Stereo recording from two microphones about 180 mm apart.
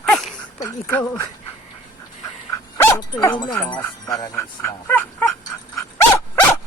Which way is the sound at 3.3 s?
20° left (ahead or behind).